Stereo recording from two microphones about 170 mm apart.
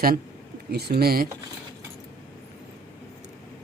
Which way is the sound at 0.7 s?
70° right (ahead or behind).